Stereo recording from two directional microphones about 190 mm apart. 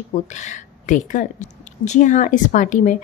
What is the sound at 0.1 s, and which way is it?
Speech, 40° left (ahead or behind).